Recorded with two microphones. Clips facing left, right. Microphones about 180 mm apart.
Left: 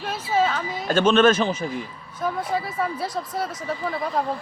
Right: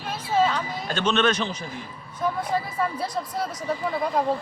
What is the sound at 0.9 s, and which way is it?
Speech, 50° left (ahead or behind).